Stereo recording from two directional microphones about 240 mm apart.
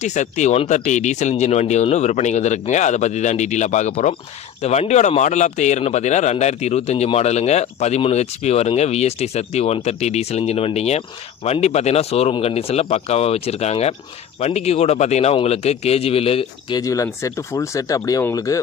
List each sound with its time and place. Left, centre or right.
0.0 s speech: left; by 18.6 s centre